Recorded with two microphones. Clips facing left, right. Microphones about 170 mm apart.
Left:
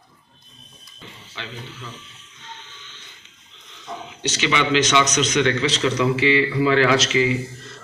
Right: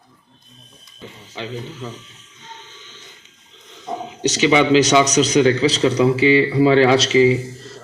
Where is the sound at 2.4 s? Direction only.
40° right (ahead or behind).